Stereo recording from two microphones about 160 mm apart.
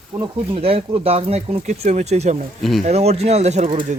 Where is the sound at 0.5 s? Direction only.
35° right (ahead or behind).